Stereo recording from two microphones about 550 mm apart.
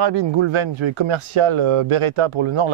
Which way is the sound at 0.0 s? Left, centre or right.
Right.